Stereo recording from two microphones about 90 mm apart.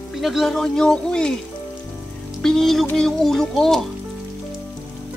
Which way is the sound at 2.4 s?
5° left (ahead or behind).